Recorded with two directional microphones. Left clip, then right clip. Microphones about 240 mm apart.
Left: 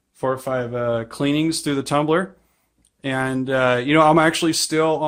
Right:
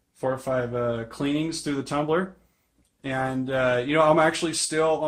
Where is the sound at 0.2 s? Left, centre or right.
Left.